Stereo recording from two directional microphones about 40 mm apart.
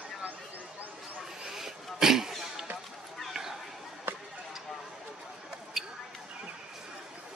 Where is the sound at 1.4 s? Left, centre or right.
Centre.